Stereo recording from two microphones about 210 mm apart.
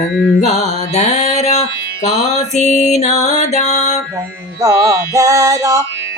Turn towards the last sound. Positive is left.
turn(degrees=-15)  # may be behind; listen again after turning